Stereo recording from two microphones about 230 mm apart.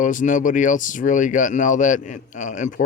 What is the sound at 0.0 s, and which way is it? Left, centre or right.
Speech, left.